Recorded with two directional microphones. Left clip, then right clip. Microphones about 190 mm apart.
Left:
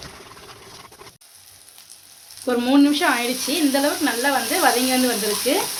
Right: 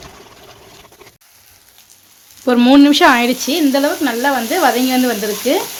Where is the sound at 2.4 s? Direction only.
55° right (ahead or behind).